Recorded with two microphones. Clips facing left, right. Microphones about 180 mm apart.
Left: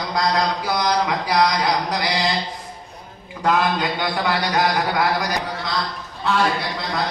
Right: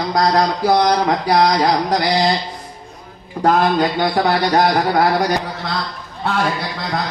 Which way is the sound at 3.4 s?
40° right (ahead or behind).